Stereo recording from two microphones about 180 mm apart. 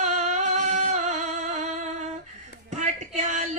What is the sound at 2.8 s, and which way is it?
Music, 40° right (ahead or behind).